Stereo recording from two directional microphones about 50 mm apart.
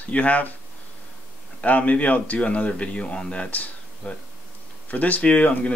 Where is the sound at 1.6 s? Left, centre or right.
Left.